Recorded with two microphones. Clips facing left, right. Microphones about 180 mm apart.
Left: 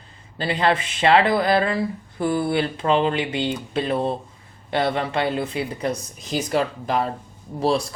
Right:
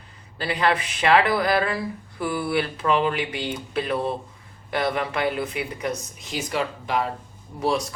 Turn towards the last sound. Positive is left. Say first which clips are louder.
# left 3 dB
turn(degrees=30)  # may be behind; listen again after turning